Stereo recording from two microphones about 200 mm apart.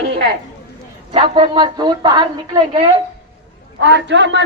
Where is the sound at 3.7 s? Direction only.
65° right (ahead or behind).